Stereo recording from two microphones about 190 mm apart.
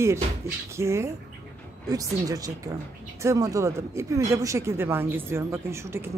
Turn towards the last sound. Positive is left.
turn(degrees=-15)  # may be behind; listen again after turning